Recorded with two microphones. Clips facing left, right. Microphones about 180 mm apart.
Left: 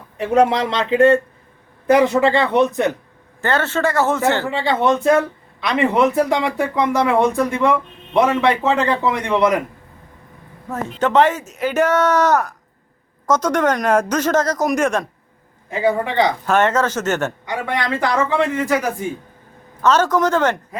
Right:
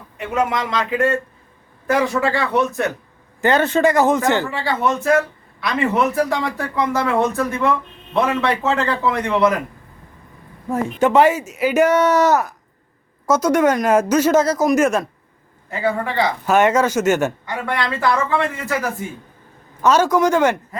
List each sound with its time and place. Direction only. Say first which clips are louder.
0.2 s speech: left 5 dB; 35° left (ahead or behind)
3.4 s speech: right 4 dB; 15° right (ahead or behind)
4.4 s a man's voice: left 3 dB; 20° left (ahead or behind)
10.7 s speech: right 3 dB; 10° right (ahead or behind)
15.7 s speech: left 3 dB; 20° left (ahead or behind)
16.5 s speech: right 2 dB; 10° right (ahead or behind)
18.0 s a man's voice: left 1 dB; 15° left (ahead or behind)
19.8 s speech: right 1 dB; 10° right (ahead or behind)